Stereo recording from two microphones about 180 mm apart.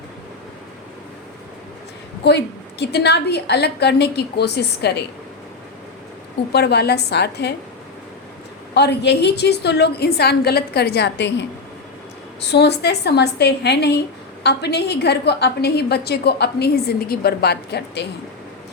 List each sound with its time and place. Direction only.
2.2 s a woman's voice: 70° left (ahead or behind)
6.5 s a woman's voice: 65° left (ahead or behind)
8.7 s a woman's voice: 70° left (ahead or behind)
12.5 s a woman's voice: 65° left (ahead or behind)